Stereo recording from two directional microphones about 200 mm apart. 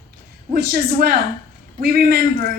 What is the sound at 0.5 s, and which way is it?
A woman's voice, 50° right (ahead or behind).